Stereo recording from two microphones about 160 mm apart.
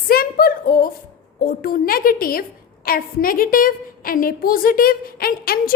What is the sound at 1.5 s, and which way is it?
A woman's voice, 65° left (ahead or behind).